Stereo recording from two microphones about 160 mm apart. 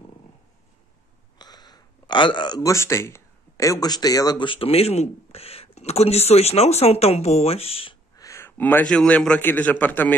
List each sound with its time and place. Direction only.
1.4 s speech: 25° left (ahead or behind)
8.2 s a man's voice: 15° left (ahead or behind)